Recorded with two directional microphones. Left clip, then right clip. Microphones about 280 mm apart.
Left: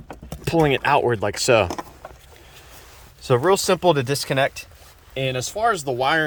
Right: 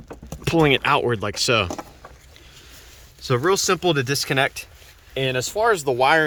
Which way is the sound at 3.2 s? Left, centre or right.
Centre.